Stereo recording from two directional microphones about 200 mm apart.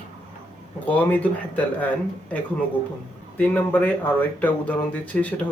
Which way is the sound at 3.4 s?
10° left (ahead or behind).